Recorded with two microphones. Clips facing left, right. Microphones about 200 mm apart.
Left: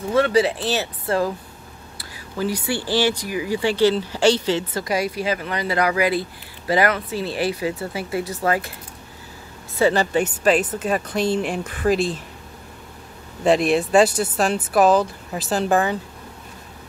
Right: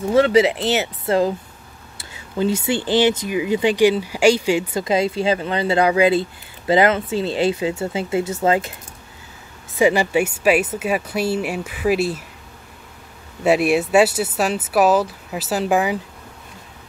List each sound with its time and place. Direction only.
0.1 s speech: 25° right (ahead or behind)
4.8 s speech: 25° right (ahead or behind)
9.8 s speech: 10° right (ahead or behind)
13.4 s speech: 5° right (ahead or behind)